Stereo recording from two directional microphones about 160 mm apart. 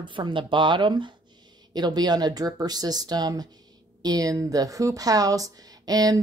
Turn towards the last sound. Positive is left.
turn(degrees=-25)  # may be behind; listen again after turning